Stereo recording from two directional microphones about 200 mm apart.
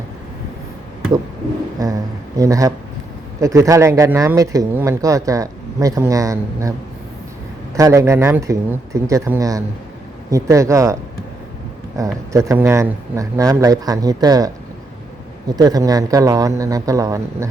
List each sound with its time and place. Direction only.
1.8 s speech: 15° right (ahead or behind)
7.8 s speech: 15° right (ahead or behind)
12.0 s speech: 15° right (ahead or behind)